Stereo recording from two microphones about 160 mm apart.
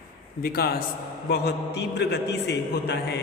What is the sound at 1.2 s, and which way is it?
A man's voice, 90° left.